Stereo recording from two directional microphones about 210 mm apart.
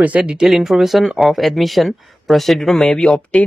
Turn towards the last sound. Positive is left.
turn(degrees=5)  # may be behind; listen again after turning